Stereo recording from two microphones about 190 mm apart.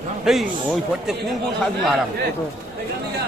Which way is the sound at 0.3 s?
Centre (ahead or behind).